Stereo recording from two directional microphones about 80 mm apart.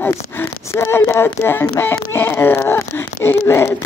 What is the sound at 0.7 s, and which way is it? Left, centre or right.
Speech, left.